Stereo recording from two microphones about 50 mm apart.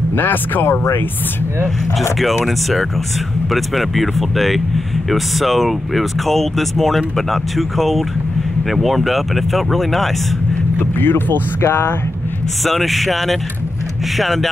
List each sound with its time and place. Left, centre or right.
0.1 s speech: left
2.1 s speech: centre
10.8 s speech: left
12.6 s speech: centre